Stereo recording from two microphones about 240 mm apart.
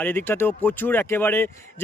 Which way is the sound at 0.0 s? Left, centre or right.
Centre.